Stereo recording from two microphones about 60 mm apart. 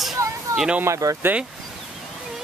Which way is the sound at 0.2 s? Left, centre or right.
Right.